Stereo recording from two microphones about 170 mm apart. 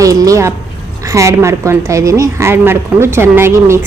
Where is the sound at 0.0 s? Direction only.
20° right (ahead or behind).